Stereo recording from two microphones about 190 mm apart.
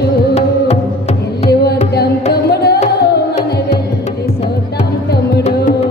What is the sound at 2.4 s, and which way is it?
Music, 55° left (ahead or behind).